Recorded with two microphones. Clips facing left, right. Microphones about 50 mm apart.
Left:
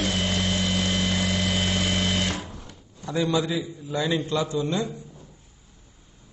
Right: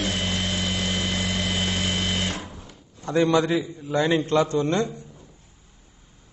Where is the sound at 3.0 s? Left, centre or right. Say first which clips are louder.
Right 4 dB; right.